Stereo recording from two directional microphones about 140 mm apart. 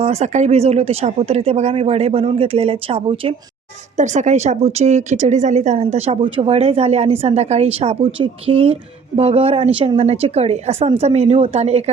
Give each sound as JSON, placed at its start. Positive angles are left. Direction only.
{"t": 0.0, "sound": "a woman's voice", "side_deg": -50}
{"t": 3.9, "sound": "a woman's voice", "side_deg": -60}